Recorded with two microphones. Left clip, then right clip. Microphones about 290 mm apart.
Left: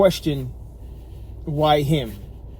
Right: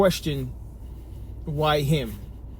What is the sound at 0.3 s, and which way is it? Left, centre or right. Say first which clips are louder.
Speech: left 5 dB; left.